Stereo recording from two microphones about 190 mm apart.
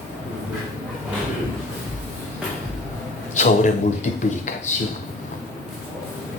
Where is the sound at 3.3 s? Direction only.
40° left (ahead or behind).